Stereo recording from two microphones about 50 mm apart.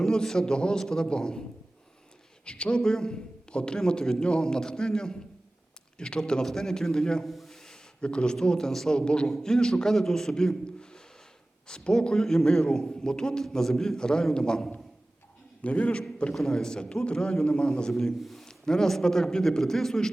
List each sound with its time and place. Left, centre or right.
0.0 s a man's voice: centre
2.4 s a man's voice: left
7.3 s a sound: centre
8.0 s a man's voice: centre
15.6 s a man's voice: left
16.3 s a man's voice: centre
17.9 s a man's voice: centre